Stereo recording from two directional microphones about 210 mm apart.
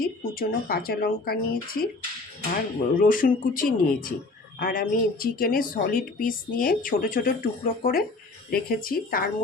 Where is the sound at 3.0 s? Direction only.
40° left (ahead or behind).